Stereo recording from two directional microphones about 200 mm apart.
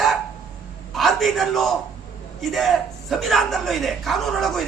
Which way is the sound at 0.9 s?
Centre (ahead or behind).